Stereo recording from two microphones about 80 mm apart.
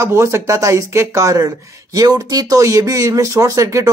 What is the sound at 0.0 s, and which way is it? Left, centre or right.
Speech, right.